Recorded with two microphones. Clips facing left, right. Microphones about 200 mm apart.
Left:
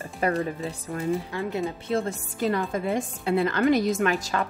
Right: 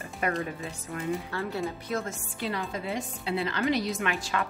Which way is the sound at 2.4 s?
50° left (ahead or behind).